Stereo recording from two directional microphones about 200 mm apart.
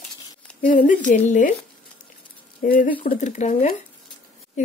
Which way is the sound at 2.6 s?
45° left (ahead or behind).